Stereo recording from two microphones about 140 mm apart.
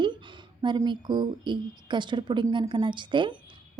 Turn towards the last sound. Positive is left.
turn(degrees=-35)  # may be behind; listen again after turning